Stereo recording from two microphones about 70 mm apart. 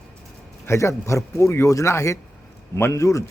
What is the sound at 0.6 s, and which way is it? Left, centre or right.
A man's voice, left.